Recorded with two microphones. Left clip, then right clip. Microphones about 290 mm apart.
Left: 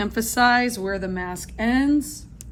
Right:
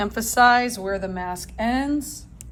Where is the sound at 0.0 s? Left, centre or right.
Right.